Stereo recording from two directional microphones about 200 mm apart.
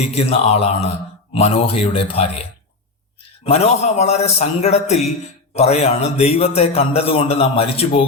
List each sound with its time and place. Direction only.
0.0 s a man's voice: 30° left (ahead or behind)
3.4 s a man's voice: 30° left (ahead or behind)